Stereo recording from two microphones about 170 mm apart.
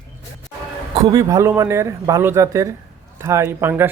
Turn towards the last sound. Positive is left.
turn(degrees=-10)  # may be behind; listen again after turning